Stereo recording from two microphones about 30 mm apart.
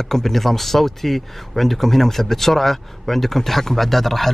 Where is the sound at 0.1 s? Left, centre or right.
Centre.